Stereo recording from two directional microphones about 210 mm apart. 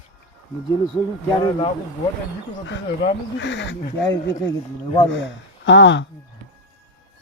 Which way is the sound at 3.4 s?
55° left (ahead or behind).